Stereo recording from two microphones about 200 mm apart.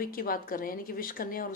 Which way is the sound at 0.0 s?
45° left (ahead or behind).